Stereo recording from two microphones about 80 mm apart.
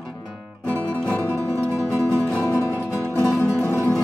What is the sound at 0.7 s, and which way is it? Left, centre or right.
Music, centre.